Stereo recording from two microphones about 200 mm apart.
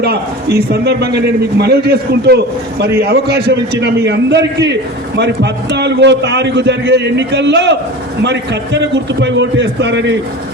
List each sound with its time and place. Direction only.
0.0 s a man's voice: 55° right (ahead or behind)